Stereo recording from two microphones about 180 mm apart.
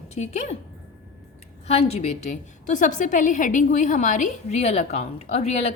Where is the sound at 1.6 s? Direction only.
35° left (ahead or behind).